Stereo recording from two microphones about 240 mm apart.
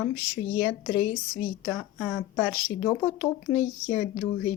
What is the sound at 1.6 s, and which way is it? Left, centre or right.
Speech, centre.